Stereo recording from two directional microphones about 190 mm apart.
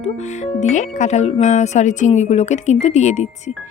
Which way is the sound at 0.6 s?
40° left (ahead or behind).